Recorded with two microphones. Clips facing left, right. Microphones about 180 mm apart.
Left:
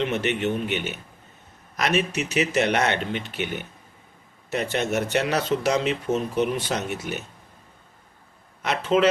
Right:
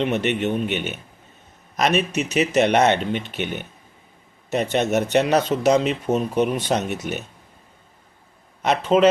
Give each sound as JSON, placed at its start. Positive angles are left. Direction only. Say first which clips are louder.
{"t": 0.0, "sound": "speech", "louder": "right 3 dB", "side_deg": -20}
{"t": 8.6, "sound": "speech", "louder": "right 4 dB", "side_deg": -20}